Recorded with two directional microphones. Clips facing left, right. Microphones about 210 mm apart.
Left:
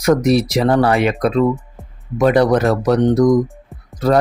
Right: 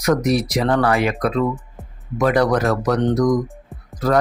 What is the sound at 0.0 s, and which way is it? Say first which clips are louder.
Speech: left 4 dB; 30° left (ahead or behind).